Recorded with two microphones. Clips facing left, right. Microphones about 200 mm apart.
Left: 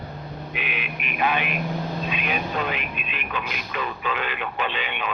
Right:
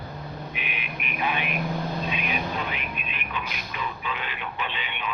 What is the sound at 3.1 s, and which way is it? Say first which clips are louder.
Speech: left 3 dB; 80° left.